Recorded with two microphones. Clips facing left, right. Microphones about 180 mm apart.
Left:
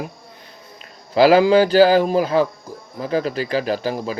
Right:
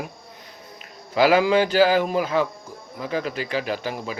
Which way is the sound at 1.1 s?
35° left (ahead or behind).